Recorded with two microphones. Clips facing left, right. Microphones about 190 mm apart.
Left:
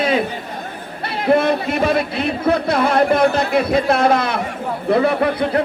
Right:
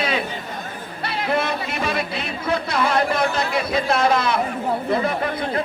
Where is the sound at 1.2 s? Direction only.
50° left (ahead or behind).